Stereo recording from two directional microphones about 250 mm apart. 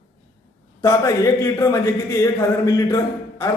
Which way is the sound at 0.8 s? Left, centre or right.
Centre.